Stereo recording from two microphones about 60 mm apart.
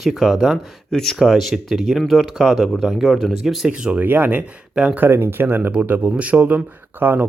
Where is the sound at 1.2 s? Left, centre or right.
Centre.